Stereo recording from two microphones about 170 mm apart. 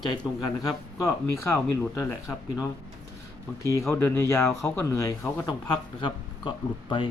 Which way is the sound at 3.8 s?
15° left (ahead or behind).